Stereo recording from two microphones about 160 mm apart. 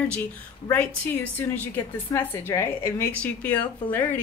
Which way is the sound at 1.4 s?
15° left (ahead or behind).